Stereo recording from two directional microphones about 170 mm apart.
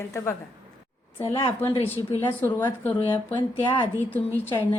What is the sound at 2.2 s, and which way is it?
Speech, 10° left (ahead or behind).